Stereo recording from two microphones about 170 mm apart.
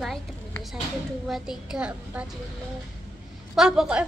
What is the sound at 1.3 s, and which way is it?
A woman's voice, centre (ahead or behind).